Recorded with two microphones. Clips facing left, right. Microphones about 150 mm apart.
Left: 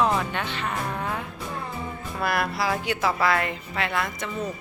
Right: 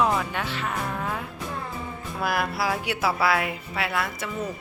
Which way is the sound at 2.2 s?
Centre (ahead or behind).